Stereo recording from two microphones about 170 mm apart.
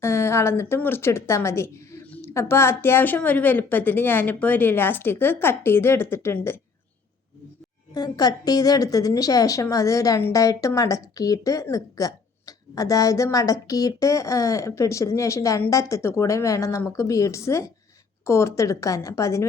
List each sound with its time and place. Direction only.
0.0 s speech: 15° left (ahead or behind)
7.9 s a woman's voice: 25° left (ahead or behind)